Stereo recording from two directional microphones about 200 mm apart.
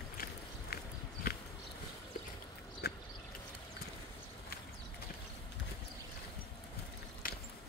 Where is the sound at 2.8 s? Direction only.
50° left (ahead or behind).